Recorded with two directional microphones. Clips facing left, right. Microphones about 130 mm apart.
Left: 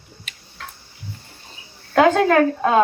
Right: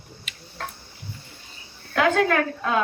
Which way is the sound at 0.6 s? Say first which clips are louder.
Right 3 dB; 40° right (ahead or behind).